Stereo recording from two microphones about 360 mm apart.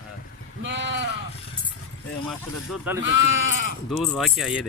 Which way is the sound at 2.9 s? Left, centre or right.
Centre.